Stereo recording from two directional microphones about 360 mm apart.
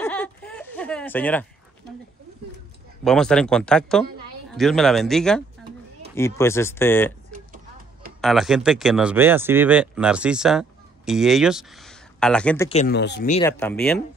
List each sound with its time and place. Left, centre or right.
0.0 s a sound: centre
3.0 s speech: centre
7.3 s a sound: right
8.2 s speech: centre
12.6 s speech: left
13.4 s speech: centre